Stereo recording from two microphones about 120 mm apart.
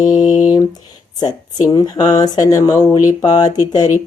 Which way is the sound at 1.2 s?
35° left (ahead or behind).